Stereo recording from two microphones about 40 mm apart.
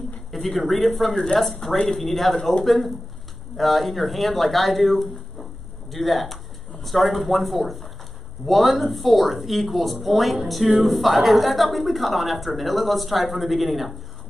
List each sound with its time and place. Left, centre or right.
0.3 s speech: centre
1.1 s speech: centre
1.9 s speech: centre